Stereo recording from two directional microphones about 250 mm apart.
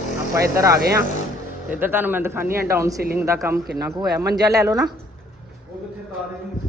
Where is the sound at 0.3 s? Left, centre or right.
Centre.